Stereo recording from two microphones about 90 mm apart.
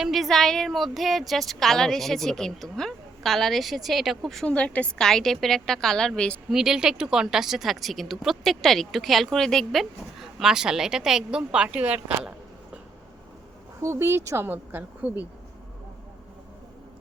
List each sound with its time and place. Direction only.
0.0 s speech: centre (ahead or behind)
4.4 s speech: 15° left (ahead or behind)
6.5 s speech: 5° right (ahead or behind)
13.8 s speech: 30° right (ahead or behind)